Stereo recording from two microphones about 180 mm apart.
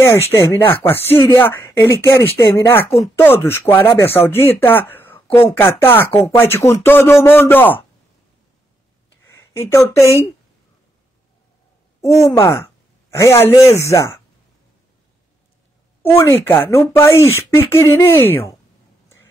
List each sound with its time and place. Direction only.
0.0 s speech: 15° left (ahead or behind)
9.2 s a sound: 15° left (ahead or behind)
12.0 s speech: 15° left (ahead or behind)
16.0 s speech: 15° left (ahead or behind)